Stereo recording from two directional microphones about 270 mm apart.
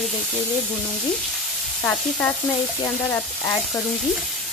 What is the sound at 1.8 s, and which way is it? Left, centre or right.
Frying, centre.